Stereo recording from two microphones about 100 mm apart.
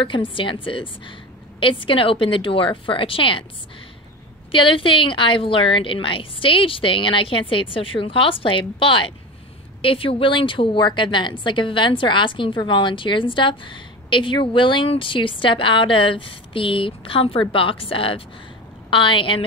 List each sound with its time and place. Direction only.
0.0 s a woman's voice: 55° left (ahead or behind)
4.5 s a woman's voice: 60° left (ahead or behind)